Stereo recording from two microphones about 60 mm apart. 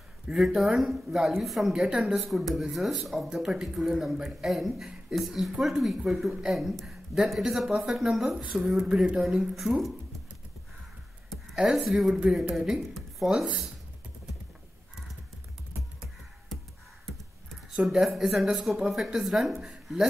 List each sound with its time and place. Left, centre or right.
0.3 s speech: centre
1.7 s speech: centre
2.2 s speech: centre
8.4 s speech: centre
11.7 s a woman's voice: centre
13.3 s speech: centre
17.0 s computer keyboard: centre
17.8 s speech: centre